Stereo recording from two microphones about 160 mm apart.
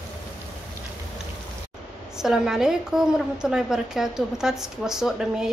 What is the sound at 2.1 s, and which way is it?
A woman's voice, 5° right (ahead or behind).